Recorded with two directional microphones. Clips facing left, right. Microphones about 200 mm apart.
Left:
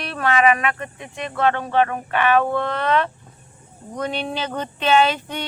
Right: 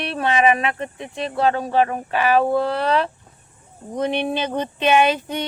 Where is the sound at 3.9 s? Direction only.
20° right (ahead or behind).